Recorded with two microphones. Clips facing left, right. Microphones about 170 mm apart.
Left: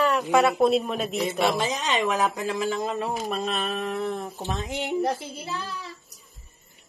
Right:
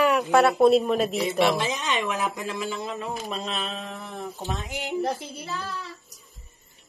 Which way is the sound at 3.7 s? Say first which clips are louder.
Left 8 dB; 60° left (ahead or behind).